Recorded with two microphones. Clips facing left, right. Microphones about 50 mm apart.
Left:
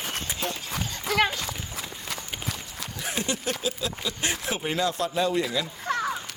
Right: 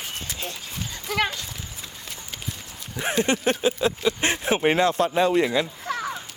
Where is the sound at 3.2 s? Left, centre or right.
Right.